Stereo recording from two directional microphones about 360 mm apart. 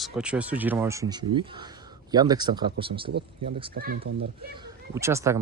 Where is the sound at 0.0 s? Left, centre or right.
Centre; by 4.3 s right.